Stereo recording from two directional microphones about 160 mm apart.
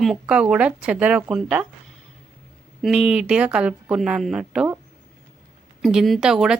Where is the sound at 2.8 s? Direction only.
5° right (ahead or behind).